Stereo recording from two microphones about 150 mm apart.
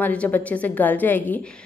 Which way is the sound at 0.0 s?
10° left (ahead or behind).